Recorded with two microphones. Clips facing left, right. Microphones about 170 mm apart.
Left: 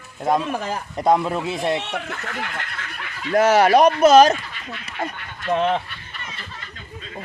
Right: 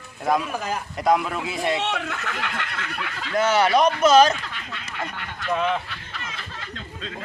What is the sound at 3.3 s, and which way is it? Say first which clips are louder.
Speech: left 5 dB; 40° left (ahead or behind).